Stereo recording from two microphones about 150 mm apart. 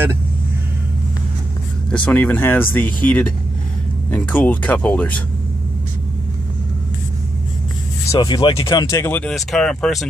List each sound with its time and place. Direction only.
1.9 s speech: 10° left (ahead or behind)
8.1 s speech: 30° left (ahead or behind); by 9.3 s 15° left (ahead or behind)
9.3 s speech: 5° left (ahead or behind)